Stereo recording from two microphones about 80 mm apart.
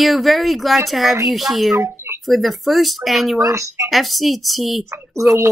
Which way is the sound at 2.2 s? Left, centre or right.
Centre.